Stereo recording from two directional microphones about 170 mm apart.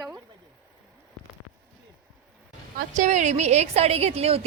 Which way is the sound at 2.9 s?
45° right (ahead or behind).